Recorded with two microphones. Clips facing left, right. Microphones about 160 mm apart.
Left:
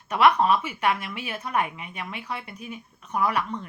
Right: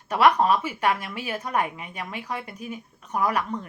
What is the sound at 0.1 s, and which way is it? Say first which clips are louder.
A woman's voice: even; 40° right (ahead or behind).